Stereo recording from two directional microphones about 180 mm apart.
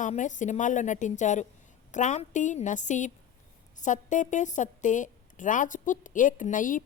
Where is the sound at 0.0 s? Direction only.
45° left (ahead or behind).